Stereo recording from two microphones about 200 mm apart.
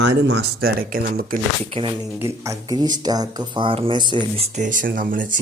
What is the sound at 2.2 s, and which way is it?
Speech, 15° right (ahead or behind).